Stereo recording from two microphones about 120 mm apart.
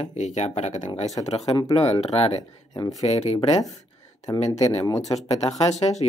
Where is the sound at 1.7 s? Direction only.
55° left (ahead or behind).